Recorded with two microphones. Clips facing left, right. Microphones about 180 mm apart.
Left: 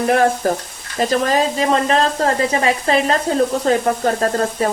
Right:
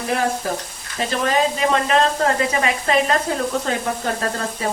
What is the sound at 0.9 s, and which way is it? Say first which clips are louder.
Speech: left 4 dB; 40° left (ahead or behind).